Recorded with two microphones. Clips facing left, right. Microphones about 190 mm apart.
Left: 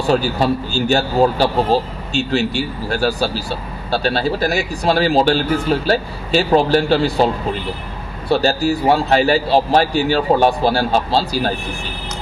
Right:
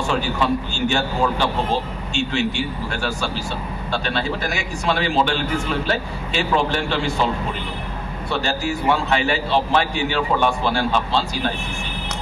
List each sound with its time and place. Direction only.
0.0 s a man's voice: 35° left (ahead or behind)
8.3 s a man's voice: 35° left (ahead or behind)